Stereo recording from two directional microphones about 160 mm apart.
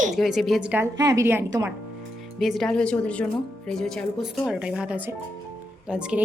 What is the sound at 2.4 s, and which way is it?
Speech, centre (ahead or behind).